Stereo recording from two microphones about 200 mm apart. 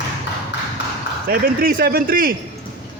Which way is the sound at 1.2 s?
45° right (ahead or behind).